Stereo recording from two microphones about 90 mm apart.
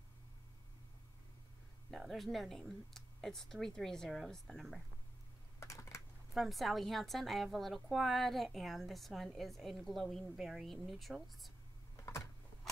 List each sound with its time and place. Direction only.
1.9 s a woman's voice: centre (ahead or behind)
5.6 s typing: 35° left (ahead or behind)
6.3 s a woman's voice: centre (ahead or behind)